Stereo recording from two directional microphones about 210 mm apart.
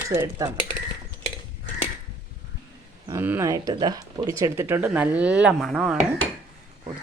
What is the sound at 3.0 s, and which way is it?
Speech, 10° right (ahead or behind).